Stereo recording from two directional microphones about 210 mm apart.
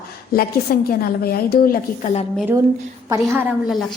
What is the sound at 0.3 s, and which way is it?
A woman's voice, 45° left (ahead or behind).